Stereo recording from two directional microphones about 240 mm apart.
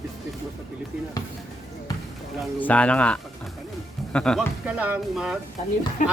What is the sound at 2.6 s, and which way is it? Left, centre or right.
Speech, centre.